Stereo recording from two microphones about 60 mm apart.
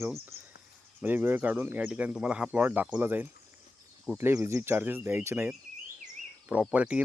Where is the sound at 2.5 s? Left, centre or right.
Right.